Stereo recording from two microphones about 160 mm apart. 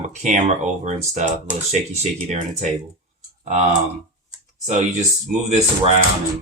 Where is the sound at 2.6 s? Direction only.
45° right (ahead or behind).